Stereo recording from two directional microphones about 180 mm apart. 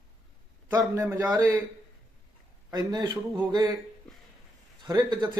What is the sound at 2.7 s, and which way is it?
A man's voice, 20° right (ahead or behind).